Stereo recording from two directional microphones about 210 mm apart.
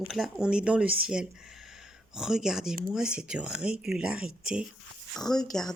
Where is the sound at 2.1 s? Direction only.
Centre (ahead or behind).